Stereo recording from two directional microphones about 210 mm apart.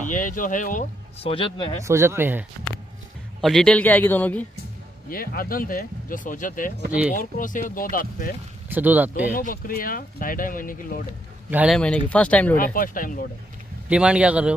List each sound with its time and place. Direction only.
0.1 s speech: 40° left (ahead or behind)
1.3 s speech: 25° left (ahead or behind)
1.8 s speech: 15° right (ahead or behind)
3.3 s a man's voice: centre (ahead or behind)
5.1 s speech: 45° left (ahead or behind)
6.9 s speech: 5° right (ahead or behind)
7.2 s speech: 40° left (ahead or behind)
8.6 s speech: 10° right (ahead or behind)
9.3 s speech: 40° left (ahead or behind)
11.5 s speech: 5° right (ahead or behind)
12.1 s a man's voice: 5° left (ahead or behind)
12.5 s speech: 40° left (ahead or behind)
13.8 s speech: 5° right (ahead or behind)